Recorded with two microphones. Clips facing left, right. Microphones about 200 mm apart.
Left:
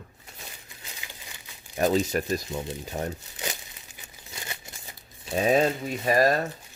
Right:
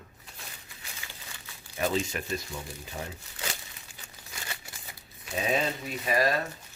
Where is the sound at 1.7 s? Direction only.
40° left (ahead or behind).